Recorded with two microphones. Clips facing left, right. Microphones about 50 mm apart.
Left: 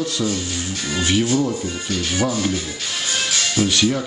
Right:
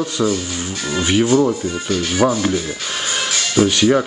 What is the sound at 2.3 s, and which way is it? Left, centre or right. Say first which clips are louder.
Music: right 4 dB; centre.